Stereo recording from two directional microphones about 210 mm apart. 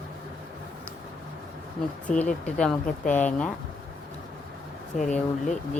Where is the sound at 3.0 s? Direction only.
35° left (ahead or behind).